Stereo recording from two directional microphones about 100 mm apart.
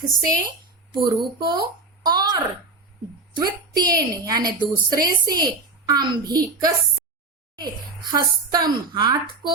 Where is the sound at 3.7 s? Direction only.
40° right (ahead or behind).